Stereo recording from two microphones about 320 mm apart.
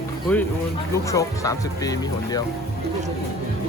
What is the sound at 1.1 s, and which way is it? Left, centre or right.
Speech, centre.